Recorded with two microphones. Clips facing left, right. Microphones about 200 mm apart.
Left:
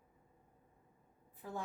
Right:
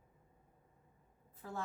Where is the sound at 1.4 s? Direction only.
15° left (ahead or behind).